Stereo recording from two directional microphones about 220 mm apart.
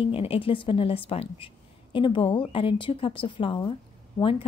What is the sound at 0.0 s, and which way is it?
Speech, 25° left (ahead or behind).